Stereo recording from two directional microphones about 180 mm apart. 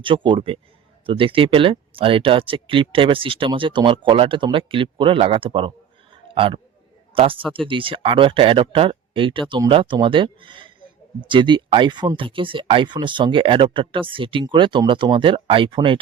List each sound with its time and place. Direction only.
0.0 s a man's voice: 25° right (ahead or behind)